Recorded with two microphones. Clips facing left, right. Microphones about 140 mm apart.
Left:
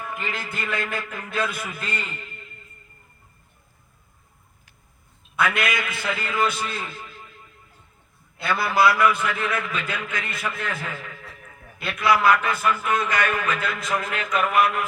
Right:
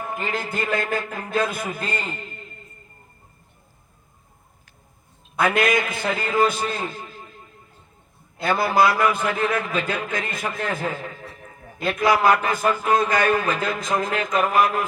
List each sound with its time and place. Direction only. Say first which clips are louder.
0.0 s a man's voice: right 4 dB; 40° right (ahead or behind)
5.4 s a man's voice: right 4 dB; 45° right (ahead or behind)